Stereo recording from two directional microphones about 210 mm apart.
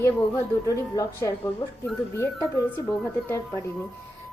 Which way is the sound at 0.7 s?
15° left (ahead or behind).